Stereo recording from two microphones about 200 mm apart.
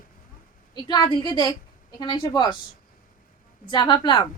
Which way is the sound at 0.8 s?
20° left (ahead or behind).